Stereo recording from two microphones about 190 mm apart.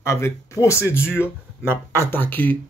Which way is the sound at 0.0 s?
15° left (ahead or behind).